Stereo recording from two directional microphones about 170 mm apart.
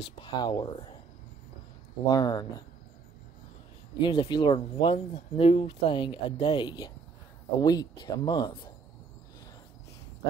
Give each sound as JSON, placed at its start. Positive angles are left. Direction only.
{"t": 0.0, "sound": "speech", "side_deg": 30}
{"t": 2.0, "sound": "speech", "side_deg": 25}
{"t": 4.0, "sound": "speech", "side_deg": 25}